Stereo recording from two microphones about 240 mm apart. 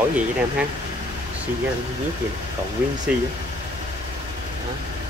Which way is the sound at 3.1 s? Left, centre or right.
Centre.